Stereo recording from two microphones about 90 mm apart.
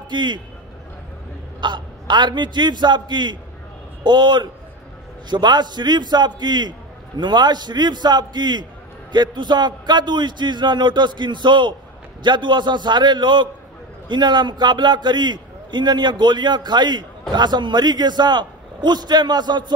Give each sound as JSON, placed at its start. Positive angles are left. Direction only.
{"t": 0.1, "sound": "a man's voice", "side_deg": -60}
{"t": 1.6, "sound": "a man's voice", "side_deg": -55}